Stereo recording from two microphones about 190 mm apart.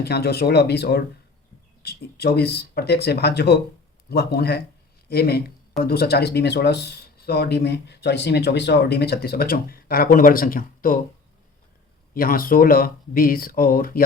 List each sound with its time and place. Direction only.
0.0 s speech: 60° left (ahead or behind)
12.1 s speech: 50° left (ahead or behind)